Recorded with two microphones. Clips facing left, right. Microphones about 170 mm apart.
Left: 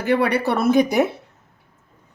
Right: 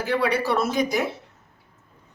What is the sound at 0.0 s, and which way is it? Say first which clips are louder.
Speech: left 4 dB; 60° left (ahead or behind).